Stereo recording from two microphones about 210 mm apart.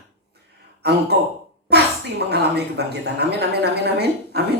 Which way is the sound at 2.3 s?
50° right (ahead or behind).